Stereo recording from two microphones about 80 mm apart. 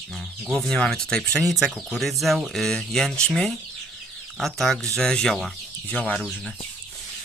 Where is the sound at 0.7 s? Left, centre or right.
Centre.